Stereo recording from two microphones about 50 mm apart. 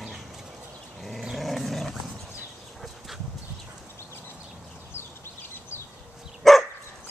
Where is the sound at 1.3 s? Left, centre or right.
Centre.